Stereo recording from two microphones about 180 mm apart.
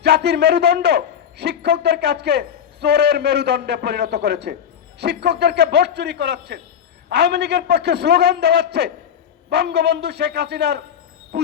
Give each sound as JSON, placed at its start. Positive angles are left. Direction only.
{"t": 0.0, "sound": "a man's voice", "side_deg": -65}
{"t": 11.3, "sound": "music", "side_deg": -60}